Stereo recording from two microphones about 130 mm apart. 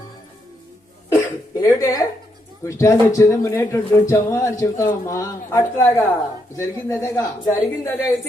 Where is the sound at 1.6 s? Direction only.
25° left (ahead or behind).